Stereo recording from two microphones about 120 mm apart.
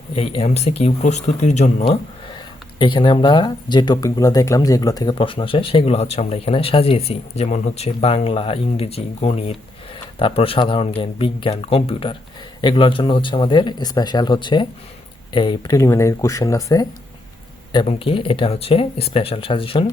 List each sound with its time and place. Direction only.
0.1 s speech: 55° left (ahead or behind); by 1.7 s 75° left (ahead or behind)
1.8 s speech: 45° left (ahead or behind)
5.1 s speech: 45° left (ahead or behind)
15.7 s speech: 25° left (ahead or behind)
17.8 s speech: 50° left (ahead or behind)